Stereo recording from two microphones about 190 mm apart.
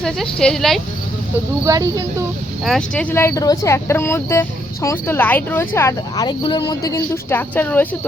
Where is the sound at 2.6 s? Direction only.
5° left (ahead or behind).